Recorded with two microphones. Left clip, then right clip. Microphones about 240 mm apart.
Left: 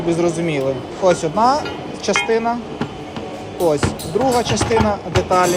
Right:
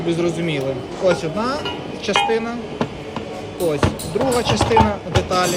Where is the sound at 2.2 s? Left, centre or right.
Centre.